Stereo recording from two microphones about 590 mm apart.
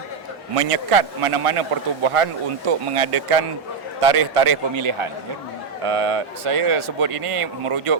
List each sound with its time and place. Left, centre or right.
0.5 s a man's voice: right